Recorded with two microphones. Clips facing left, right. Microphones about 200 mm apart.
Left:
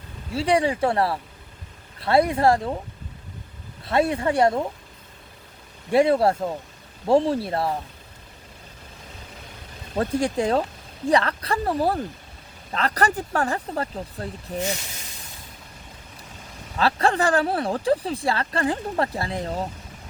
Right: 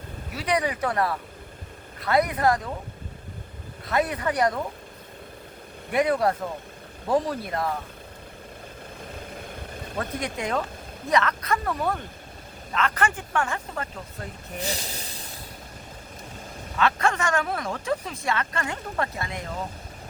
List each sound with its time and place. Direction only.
0.3 s speech: 30° left (ahead or behind)
3.8 s speech: 30° left (ahead or behind)
5.9 s speech: 30° left (ahead or behind)
10.0 s speech: 30° left (ahead or behind)
14.6 s speech: 35° right (ahead or behind)
16.7 s speech: 35° left (ahead or behind)